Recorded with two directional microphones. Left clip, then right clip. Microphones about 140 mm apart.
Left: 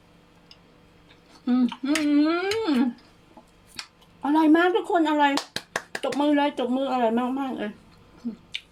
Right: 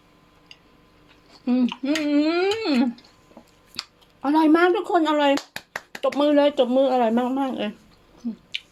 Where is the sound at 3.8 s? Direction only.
50° right (ahead or behind).